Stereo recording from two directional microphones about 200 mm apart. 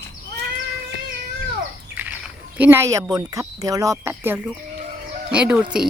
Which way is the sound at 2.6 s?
10° right (ahead or behind).